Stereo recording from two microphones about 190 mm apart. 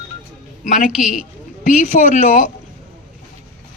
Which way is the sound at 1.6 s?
40° left (ahead or behind).